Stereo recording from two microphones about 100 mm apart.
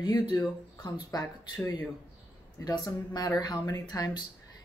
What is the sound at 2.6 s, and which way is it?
Speech, 45° left (ahead or behind).